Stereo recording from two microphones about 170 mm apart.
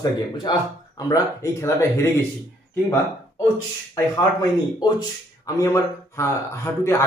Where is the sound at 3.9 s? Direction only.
20° left (ahead or behind).